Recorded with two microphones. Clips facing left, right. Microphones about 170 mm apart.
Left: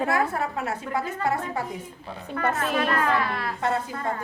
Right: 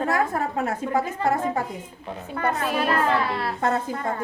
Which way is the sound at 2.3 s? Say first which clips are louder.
Right 1 dB; 15° right (ahead or behind).